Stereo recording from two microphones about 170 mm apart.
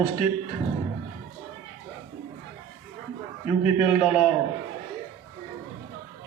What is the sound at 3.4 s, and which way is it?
Speech, 35° left (ahead or behind).